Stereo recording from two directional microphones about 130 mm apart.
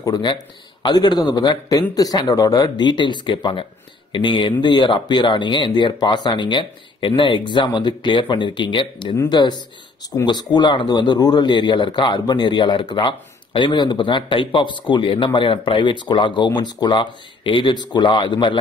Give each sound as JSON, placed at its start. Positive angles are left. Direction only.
{"t": 0.0, "sound": "a man's voice", "side_deg": 35}